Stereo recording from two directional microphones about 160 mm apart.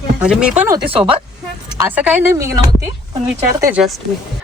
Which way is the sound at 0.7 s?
30° right (ahead or behind).